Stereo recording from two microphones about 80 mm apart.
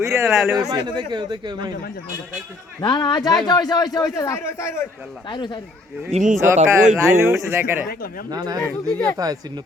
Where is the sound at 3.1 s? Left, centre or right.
Left.